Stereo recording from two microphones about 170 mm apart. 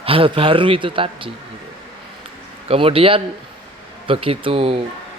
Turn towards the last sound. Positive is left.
turn(degrees=-35)  # may be behind; listen again after turning